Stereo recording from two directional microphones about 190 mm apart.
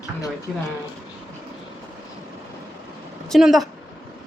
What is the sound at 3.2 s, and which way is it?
Speech, centre (ahead or behind).